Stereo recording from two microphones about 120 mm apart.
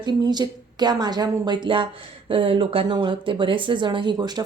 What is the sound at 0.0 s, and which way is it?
Speech, 35° right (ahead or behind).